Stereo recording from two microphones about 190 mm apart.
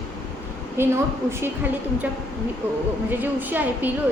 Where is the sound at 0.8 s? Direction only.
10° right (ahead or behind).